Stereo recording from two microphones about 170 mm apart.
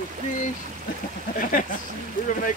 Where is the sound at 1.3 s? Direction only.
55° left (ahead or behind).